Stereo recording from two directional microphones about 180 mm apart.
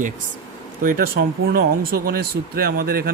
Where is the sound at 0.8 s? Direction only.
55° right (ahead or behind).